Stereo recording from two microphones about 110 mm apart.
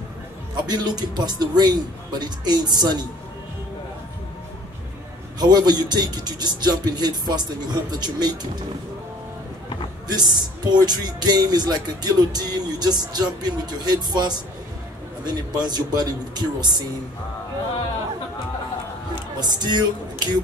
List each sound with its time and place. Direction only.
0.7 s speech: 40° right (ahead or behind)
5.4 s speech: 40° right (ahead or behind)
10.0 s speech: 40° right (ahead or behind)
19.4 s speech: 40° right (ahead or behind)